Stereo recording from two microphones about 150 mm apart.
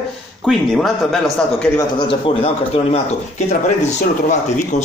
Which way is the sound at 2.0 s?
35° left (ahead or behind).